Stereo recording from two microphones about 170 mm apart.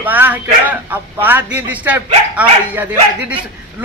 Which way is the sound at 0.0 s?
10° right (ahead or behind).